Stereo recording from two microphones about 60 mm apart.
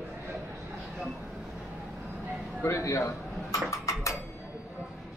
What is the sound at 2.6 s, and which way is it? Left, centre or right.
Speech, left.